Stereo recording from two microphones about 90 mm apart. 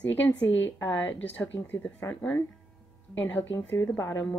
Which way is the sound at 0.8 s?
20° left (ahead or behind).